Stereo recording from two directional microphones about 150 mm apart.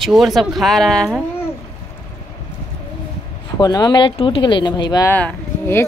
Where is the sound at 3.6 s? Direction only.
25° left (ahead or behind).